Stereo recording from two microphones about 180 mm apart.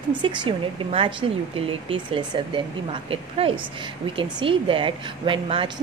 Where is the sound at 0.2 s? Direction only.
25° right (ahead or behind).